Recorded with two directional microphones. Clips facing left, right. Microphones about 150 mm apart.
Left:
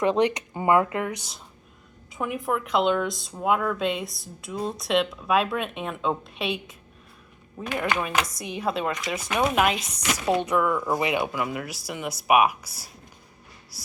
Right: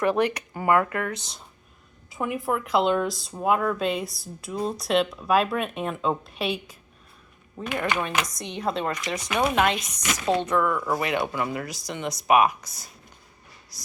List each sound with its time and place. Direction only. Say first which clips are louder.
0.0 s speech: left 1 dB; 20° left (ahead or behind)
2.0 s speech: right 1 dB; centre (ahead or behind); by 11.3 s 20° left (ahead or behind)
11.3 s speech: right 1 dB; 5° left (ahead or behind)
13.7 s a sound: left 3 dB; 5° left (ahead or behind)